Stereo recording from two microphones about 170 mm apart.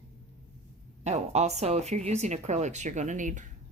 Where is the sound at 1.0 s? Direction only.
40° right (ahead or behind).